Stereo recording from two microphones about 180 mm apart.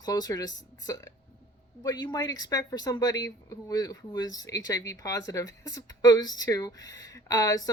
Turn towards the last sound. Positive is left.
turn(degrees=20)  # may be behind; listen again after turning